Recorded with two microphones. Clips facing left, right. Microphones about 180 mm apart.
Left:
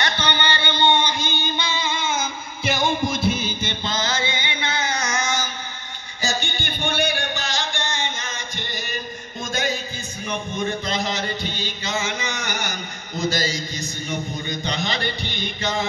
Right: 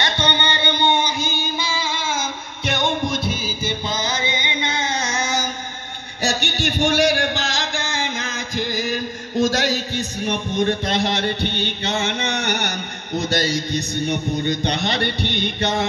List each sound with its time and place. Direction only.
0.0 s music: 25° right (ahead or behind)
6.2 s a man's voice: 75° right (ahead or behind)